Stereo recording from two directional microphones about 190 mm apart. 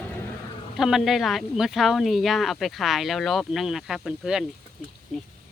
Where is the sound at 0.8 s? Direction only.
Centre (ahead or behind).